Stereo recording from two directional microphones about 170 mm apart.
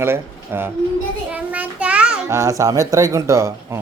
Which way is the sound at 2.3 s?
15° right (ahead or behind).